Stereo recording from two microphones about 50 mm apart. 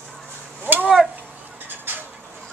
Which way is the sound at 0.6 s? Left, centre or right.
Right.